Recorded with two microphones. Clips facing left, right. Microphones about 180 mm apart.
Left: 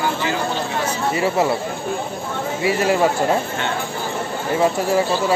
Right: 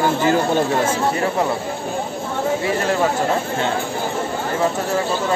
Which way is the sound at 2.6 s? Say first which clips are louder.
Left 2 dB; 10° left (ahead or behind).